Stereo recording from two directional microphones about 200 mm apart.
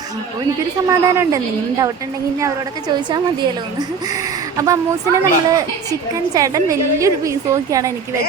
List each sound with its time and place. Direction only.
0.9 s a woman's voice: 15° right (ahead or behind)
4.5 s a woman's voice: 15° right (ahead or behind)